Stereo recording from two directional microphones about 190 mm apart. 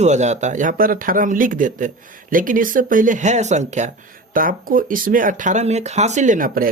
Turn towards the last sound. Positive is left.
turn(degrees=-50)  # may be behind; listen again after turning